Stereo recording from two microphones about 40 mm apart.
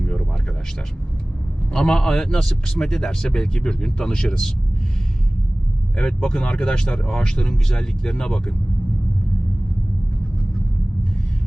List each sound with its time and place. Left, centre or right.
0.0 s a sound: left
1.7 s speech: centre
6.0 s speech: centre